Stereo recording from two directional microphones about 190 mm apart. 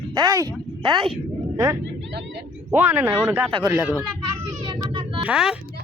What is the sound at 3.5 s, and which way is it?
Speech, 15° right (ahead or behind).